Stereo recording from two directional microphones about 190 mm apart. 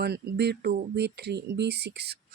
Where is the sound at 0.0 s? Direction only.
60° right (ahead or behind).